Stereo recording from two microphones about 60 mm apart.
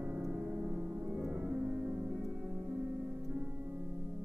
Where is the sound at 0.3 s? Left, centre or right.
Centre.